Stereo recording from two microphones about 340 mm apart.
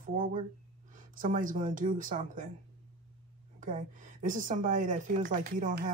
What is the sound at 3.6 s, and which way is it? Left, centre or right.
A woman's voice, right.